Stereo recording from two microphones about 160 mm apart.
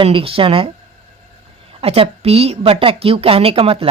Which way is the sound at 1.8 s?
40° right (ahead or behind).